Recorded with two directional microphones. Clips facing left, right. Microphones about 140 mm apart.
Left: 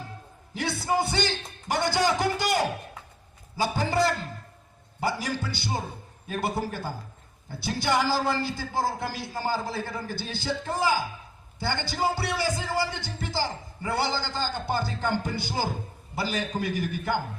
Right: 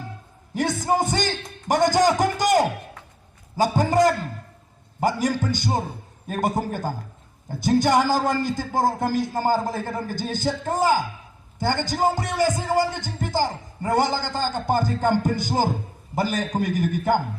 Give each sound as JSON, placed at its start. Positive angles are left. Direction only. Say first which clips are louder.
{"t": 0.5, "sound": "a man's voice", "louder": "right 5 dB", "side_deg": -45}
{"t": 3.6, "sound": "a man's voice", "louder": "right 6 dB", "side_deg": -45}